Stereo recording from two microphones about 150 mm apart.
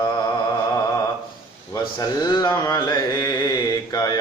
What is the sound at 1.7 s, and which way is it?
Carnatic music, 25° left (ahead or behind).